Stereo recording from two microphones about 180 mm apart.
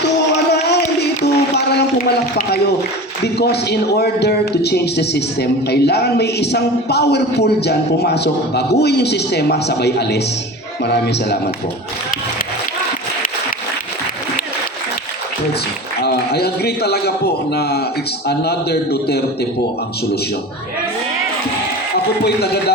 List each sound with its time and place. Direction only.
0.5 s a sound: 65° left (ahead or behind)
3.2 s a man's voice: 65° left (ahead or behind)
16.0 s a man's voice: 65° left (ahead or behind)
22.2 s a man's voice: 65° left (ahead or behind)